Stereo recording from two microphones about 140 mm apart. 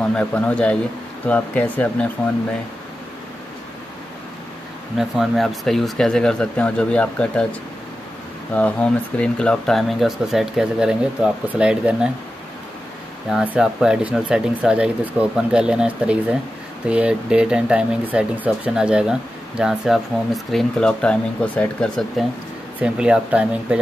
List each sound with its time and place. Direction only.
0.1 s speech: 10° left (ahead or behind)
4.9 s speech: centre (ahead or behind)
8.5 s speech: 10° left (ahead or behind); by 12.1 s 5° right (ahead or behind)
13.3 s speech: 5° right (ahead or behind)
22.8 s speech: 5° right (ahead or behind)